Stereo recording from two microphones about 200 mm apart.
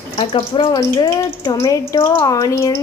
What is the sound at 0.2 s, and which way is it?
Speech, 25° left (ahead or behind).